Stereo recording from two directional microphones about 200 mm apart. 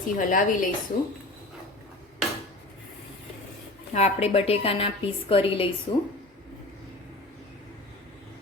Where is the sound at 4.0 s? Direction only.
30° left (ahead or behind).